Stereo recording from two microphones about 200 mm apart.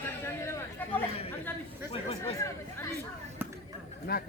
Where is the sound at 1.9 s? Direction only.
25° left (ahead or behind).